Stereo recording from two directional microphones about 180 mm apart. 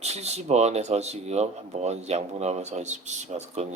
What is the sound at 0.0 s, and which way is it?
Speech, 35° right (ahead or behind).